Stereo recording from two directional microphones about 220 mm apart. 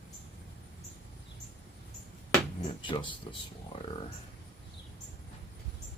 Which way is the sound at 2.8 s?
20° left (ahead or behind).